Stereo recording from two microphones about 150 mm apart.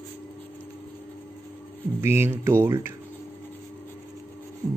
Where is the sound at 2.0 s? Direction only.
15° right (ahead or behind).